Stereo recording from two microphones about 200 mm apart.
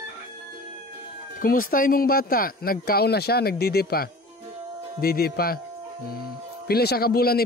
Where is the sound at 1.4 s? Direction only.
45° left (ahead or behind).